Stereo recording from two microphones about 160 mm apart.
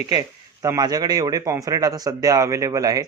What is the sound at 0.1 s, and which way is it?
Speech, 20° right (ahead or behind).